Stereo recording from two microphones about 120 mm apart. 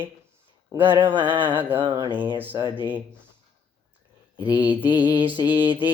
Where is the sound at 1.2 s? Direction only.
15° right (ahead or behind).